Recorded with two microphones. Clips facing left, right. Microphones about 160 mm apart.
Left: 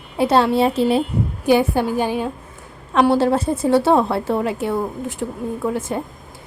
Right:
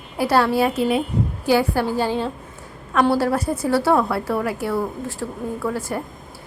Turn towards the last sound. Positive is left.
turn(degrees=20)  # may be behind; listen again after turning